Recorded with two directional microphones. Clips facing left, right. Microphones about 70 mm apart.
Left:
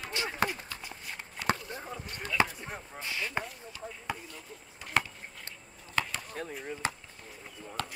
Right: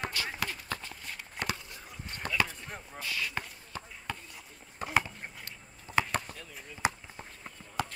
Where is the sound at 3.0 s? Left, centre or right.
Left.